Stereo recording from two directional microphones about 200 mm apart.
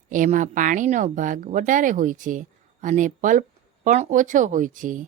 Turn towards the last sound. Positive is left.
turn(degrees=-40)  # may be behind; listen again after turning